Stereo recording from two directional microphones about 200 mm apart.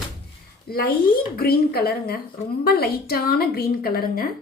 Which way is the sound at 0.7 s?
50° left (ahead or behind).